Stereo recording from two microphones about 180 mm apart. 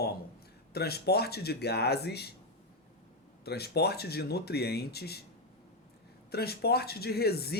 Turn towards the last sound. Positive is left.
turn(degrees=60)  # may be behind; listen again after turning